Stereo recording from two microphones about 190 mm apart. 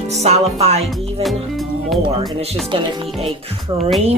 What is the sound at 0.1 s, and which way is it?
Speech, 35° right (ahead or behind).